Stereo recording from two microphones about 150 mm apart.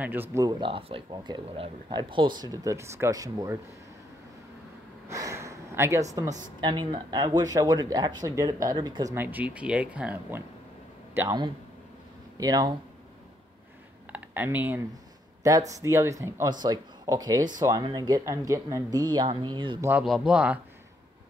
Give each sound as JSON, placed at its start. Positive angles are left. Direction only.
{"t": 0.0, "sound": "speech", "side_deg": -15}
{"t": 0.6, "sound": "speech", "side_deg": -35}
{"t": 5.0, "sound": "sniff", "side_deg": -20}
{"t": 6.1, "sound": "speech", "side_deg": -30}
{"t": 9.1, "sound": "speech", "side_deg": -15}
{"t": 12.4, "sound": "speech", "side_deg": -25}
{"t": 14.1, "sound": "speech", "side_deg": -10}
{"t": 15.4, "sound": "speech", "side_deg": -20}
{"t": 19.8, "sound": "speech", "side_deg": -10}